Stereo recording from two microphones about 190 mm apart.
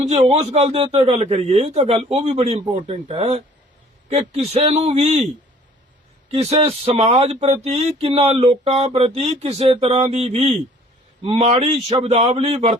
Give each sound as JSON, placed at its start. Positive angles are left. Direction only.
{"t": 0.0, "sound": "speech", "side_deg": -35}